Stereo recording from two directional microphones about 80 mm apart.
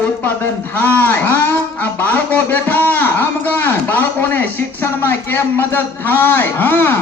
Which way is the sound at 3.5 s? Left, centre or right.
Left.